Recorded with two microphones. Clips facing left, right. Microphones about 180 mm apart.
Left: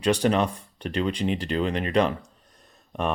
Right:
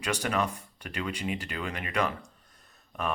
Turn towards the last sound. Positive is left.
turn(degrees=30)  # may be behind; listen again after turning